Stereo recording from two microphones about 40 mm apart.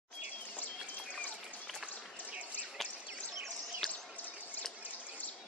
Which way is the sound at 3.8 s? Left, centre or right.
Centre.